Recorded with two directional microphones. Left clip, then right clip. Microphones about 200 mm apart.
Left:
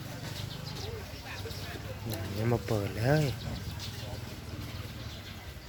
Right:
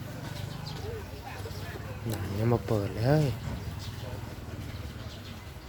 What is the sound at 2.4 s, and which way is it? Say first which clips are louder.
Speech: right 3 dB; centre (ahead or behind).